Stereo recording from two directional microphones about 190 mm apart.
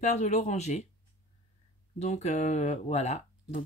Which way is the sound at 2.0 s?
35° left (ahead or behind).